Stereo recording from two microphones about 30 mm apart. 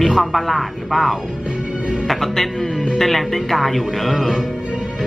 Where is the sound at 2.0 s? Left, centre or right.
Centre.